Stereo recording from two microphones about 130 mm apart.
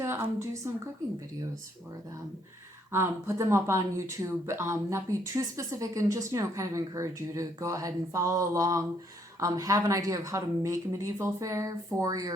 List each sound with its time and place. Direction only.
0.0 s a woman's voice: 20° right (ahead or behind)
2.9 s speech: 20° right (ahead or behind)